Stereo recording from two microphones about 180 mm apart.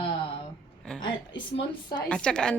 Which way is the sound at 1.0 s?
25° left (ahead or behind).